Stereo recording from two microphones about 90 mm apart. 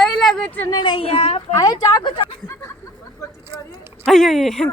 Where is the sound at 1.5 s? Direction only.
40° left (ahead or behind).